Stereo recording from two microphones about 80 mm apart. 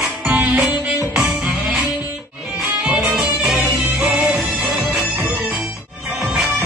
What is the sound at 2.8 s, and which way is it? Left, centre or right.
Music, centre.